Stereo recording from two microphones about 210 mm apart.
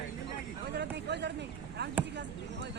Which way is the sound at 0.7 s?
55° right (ahead or behind).